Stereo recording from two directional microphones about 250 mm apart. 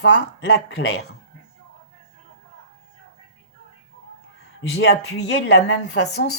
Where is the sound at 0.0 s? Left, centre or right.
Left.